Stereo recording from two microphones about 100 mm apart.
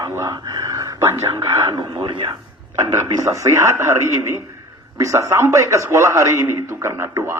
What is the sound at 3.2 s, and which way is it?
A man's voice, 30° right (ahead or behind).